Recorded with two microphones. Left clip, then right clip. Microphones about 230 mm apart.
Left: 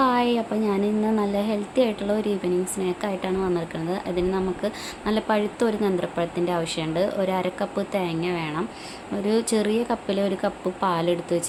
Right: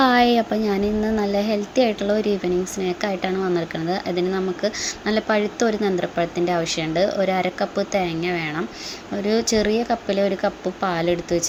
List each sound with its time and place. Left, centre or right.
0.0 s a woman's voice: centre